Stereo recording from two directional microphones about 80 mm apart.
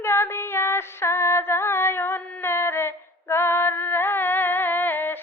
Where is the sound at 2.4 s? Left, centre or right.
Left.